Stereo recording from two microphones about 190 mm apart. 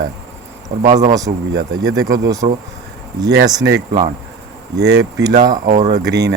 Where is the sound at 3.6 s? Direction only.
60° right (ahead or behind).